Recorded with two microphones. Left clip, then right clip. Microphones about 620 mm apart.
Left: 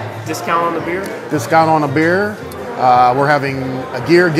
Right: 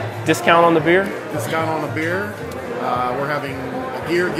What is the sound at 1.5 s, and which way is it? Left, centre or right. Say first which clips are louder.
Speech: left 11 dB; left.